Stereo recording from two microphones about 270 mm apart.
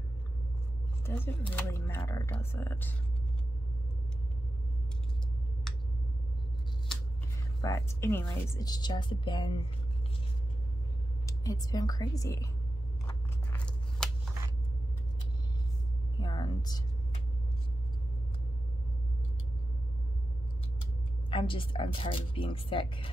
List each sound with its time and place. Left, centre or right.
1.0 s speech: centre
7.6 s speech: centre
11.2 s speech: centre
13.0 s scissors: centre
16.2 s a sound: centre
20.8 s speech: centre